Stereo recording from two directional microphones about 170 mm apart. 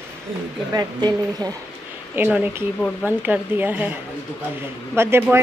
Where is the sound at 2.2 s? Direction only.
10° right (ahead or behind).